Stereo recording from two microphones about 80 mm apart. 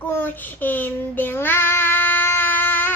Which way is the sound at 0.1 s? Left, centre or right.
Left.